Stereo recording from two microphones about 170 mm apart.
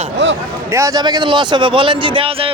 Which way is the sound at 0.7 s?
15° right (ahead or behind).